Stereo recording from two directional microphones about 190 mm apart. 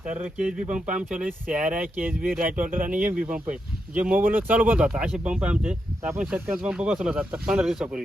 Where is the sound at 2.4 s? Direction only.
45° right (ahead or behind).